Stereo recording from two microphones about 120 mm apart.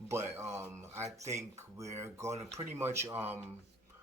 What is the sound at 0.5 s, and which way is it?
Speech, 25° right (ahead or behind).